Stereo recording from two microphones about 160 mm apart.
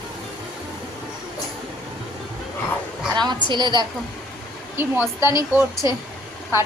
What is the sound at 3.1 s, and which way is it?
Speech, 25° right (ahead or behind).